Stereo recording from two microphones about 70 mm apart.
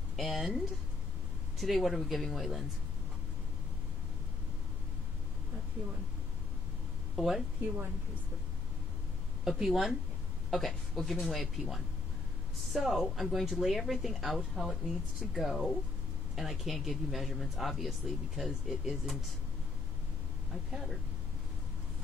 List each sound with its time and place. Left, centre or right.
0.1 s speech: centre
7.2 s speech: centre
7.6 s a woman's voice: right
9.4 s speech: centre
12.7 s speech: centre